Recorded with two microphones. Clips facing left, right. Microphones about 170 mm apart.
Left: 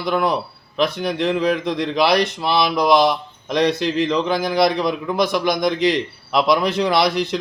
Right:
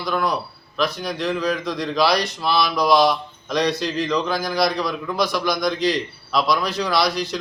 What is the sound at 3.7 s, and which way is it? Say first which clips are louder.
Speech: left 4 dB; 55° left (ahead or behind).